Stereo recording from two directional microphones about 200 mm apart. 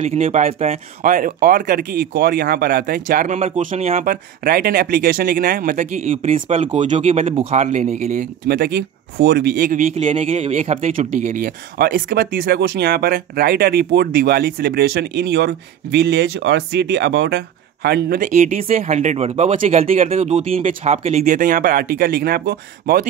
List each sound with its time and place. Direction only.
0.0 s speech: 35° right (ahead or behind); by 23.0 s 50° right (ahead or behind)